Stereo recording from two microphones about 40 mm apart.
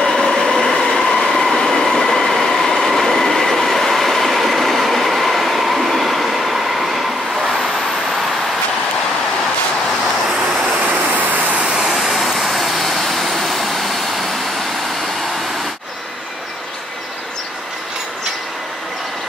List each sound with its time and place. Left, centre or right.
0.0 s train: centre
10.7 s a sound: right
11.6 s vehicle: centre